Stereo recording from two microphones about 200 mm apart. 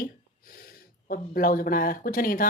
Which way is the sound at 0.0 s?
45° left (ahead or behind).